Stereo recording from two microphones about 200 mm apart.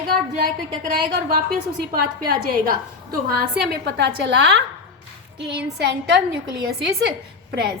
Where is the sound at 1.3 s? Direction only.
45° right (ahead or behind).